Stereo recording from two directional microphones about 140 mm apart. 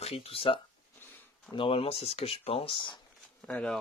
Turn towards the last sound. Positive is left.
turn(degrees=5)  # may be behind; listen again after turning